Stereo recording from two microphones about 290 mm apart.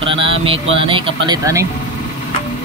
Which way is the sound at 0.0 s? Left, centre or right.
Centre.